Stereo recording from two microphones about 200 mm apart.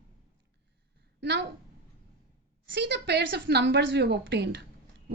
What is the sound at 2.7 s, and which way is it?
A woman's voice, 60° right (ahead or behind).